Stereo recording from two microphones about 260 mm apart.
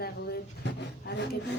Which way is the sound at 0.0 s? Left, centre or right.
Left.